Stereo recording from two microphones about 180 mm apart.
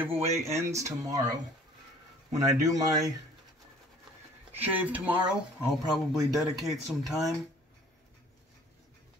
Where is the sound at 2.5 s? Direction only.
15° right (ahead or behind).